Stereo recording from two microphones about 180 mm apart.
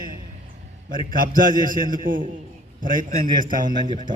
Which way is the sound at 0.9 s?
50° right (ahead or behind).